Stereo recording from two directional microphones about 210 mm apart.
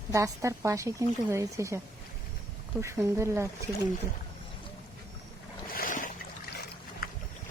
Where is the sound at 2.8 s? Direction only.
15° right (ahead or behind).